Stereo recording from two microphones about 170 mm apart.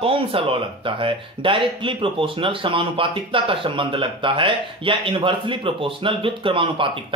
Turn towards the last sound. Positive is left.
turn(degrees=-30)  # may be behind; listen again after turning